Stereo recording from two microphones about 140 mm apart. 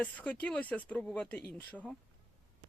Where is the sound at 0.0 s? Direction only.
10° left (ahead or behind).